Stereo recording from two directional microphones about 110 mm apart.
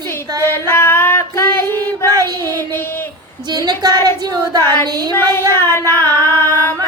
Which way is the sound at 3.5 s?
40° right (ahead or behind).